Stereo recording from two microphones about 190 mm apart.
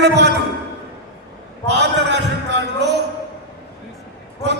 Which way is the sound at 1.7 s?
65° right (ahead or behind).